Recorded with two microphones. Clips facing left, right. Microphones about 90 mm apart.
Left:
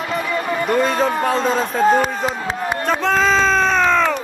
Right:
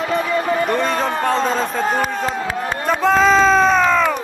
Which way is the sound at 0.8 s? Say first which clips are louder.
Left 2 dB; centre (ahead or behind).